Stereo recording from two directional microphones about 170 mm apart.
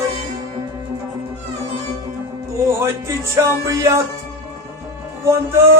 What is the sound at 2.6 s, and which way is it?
Music, 15° right (ahead or behind).